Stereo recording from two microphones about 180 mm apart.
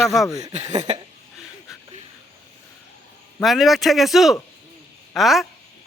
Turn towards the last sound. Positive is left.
turn(degrees=0)  # may be behind; listen again after turning